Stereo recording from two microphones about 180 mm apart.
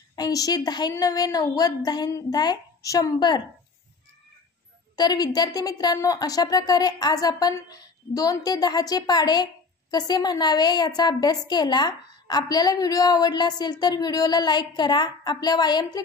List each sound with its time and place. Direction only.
0.1 s a woman's voice: 20° left (ahead or behind)
4.9 s a woman's voice: 25° left (ahead or behind)